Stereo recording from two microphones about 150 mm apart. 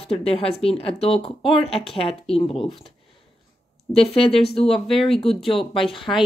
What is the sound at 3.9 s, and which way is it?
Speech, 40° left (ahead or behind).